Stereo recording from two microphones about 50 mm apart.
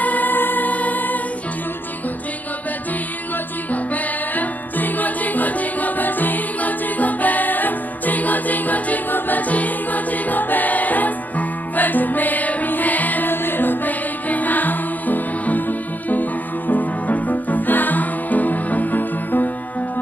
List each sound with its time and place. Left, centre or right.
0.0 s music: left
3.7 s music: left